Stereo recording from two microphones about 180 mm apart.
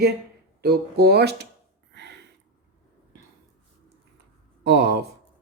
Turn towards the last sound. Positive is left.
turn(degrees=-65)  # may be behind; listen again after turning